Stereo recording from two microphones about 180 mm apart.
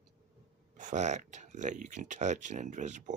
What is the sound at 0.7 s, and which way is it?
Speech, 40° right (ahead or behind).